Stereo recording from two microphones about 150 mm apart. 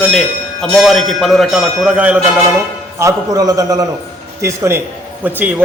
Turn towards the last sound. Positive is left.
turn(degrees=-10)  # may be behind; listen again after turning